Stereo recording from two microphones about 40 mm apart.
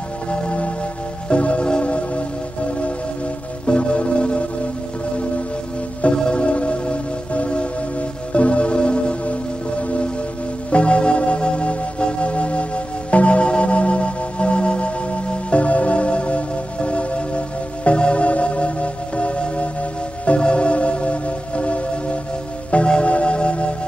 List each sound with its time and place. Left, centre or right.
0.3 s music: left
6.1 s music: left